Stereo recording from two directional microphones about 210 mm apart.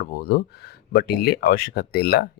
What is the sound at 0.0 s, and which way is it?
Speech, 45° left (ahead or behind).